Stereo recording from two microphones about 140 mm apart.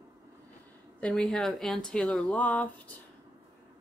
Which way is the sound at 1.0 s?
5° left (ahead or behind).